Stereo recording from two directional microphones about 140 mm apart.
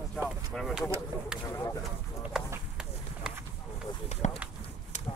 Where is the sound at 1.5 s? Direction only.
20° left (ahead or behind).